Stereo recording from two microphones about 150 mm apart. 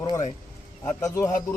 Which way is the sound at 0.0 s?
25° left (ahead or behind).